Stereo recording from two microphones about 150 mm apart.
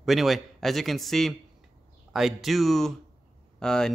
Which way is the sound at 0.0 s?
Centre (ahead or behind).